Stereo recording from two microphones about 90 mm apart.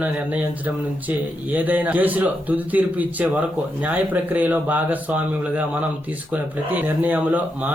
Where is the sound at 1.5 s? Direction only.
20° right (ahead or behind).